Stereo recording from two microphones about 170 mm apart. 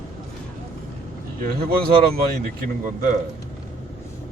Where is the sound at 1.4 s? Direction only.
65° right (ahead or behind).